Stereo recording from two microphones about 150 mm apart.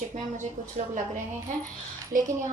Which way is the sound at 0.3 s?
55° right (ahead or behind).